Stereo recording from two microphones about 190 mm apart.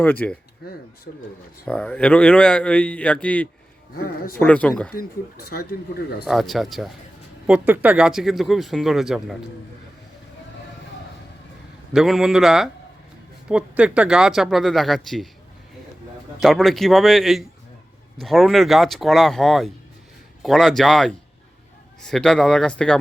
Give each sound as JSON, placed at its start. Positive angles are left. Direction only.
{"t": 0.0, "sound": "speech", "side_deg": 10}
{"t": 1.6, "sound": "speech", "side_deg": 5}
{"t": 4.9, "sound": "speech", "side_deg": 55}
{"t": 6.2, "sound": "speech", "side_deg": 0}
{"t": 11.9, "sound": "speech", "side_deg": 0}
{"t": 16.4, "sound": "speech", "side_deg": 0}